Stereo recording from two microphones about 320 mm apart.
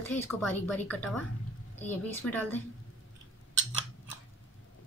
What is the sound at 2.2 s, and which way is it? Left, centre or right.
Speech, left.